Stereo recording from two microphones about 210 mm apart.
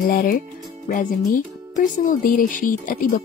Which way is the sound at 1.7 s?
40° left (ahead or behind).